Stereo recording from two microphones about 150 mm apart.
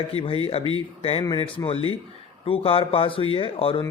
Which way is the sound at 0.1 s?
40° left (ahead or behind).